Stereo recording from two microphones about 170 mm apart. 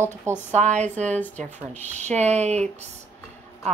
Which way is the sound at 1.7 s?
45° right (ahead or behind).